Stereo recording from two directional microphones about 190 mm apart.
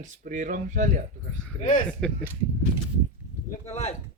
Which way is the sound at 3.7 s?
35° left (ahead or behind).